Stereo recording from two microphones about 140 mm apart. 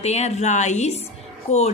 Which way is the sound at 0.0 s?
55° left (ahead or behind).